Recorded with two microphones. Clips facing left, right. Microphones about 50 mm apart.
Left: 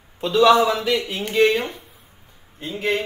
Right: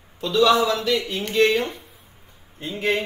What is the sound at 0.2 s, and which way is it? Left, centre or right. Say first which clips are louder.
Speech: left 3 dB; left.